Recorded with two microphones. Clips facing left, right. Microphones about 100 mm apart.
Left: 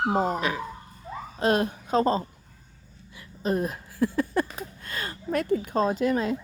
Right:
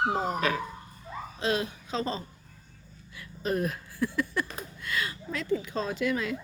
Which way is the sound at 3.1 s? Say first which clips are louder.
Left 3 dB; 30° left (ahead or behind).